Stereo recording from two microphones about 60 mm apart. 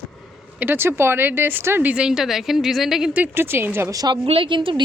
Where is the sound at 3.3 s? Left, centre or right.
Right.